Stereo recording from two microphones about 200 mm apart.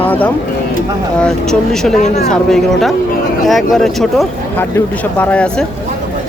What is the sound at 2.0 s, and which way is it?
Speech, 35° left (ahead or behind).